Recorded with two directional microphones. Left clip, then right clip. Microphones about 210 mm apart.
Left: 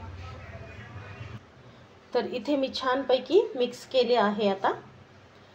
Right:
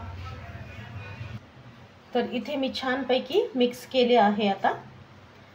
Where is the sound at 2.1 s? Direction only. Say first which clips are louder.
Left 1 dB; 35° left (ahead or behind).